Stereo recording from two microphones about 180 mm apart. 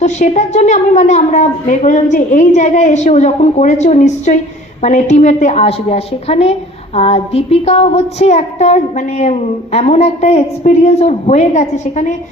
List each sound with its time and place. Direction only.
0.0 s a woman's voice: 40° left (ahead or behind)